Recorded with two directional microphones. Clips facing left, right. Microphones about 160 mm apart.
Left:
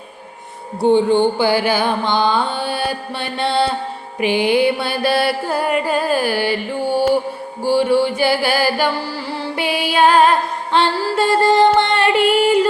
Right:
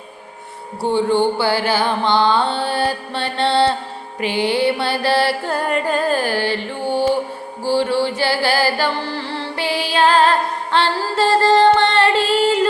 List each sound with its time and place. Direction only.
0.8 s mantra: 20° left (ahead or behind)
7.6 s music: 15° left (ahead or behind)